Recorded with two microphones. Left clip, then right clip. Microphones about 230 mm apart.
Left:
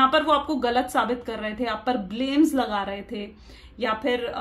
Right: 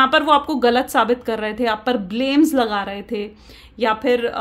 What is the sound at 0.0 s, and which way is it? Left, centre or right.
A woman's voice, right.